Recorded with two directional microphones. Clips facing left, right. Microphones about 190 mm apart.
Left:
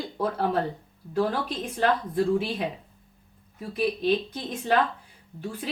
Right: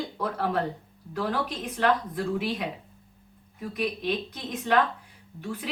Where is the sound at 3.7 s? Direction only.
30° left (ahead or behind).